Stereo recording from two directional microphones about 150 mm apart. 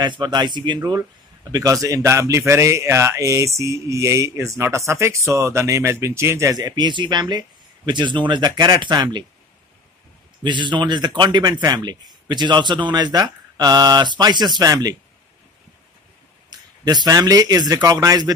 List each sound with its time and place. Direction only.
0.0 s speech: 30° right (ahead or behind)
10.4 s speech: 30° right (ahead or behind)
16.4 s speech: 25° right (ahead or behind)